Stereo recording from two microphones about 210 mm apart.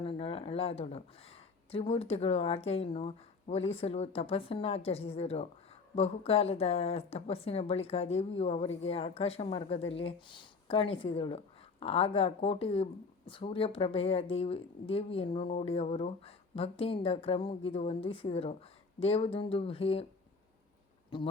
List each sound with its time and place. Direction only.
0.0 s speech: 25° left (ahead or behind)
21.1 s speech: 25° left (ahead or behind)